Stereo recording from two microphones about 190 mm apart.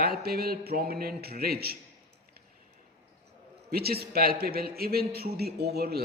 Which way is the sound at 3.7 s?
55° right (ahead or behind).